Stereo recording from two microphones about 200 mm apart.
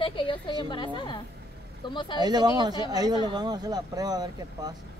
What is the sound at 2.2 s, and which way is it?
Speech, 20° right (ahead or behind).